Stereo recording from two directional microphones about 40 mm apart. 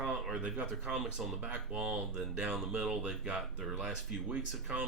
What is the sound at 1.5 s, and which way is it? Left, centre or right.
Speech, right.